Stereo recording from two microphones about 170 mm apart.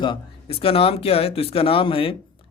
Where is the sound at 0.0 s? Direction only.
30° left (ahead or behind).